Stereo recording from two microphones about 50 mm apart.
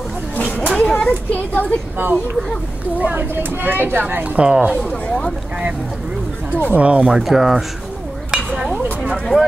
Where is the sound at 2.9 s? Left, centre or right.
Right.